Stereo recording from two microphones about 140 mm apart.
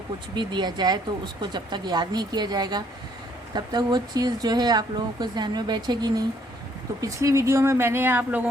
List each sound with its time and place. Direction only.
0.3 s speech: 30° right (ahead or behind); by 8.4 s 15° right (ahead or behind)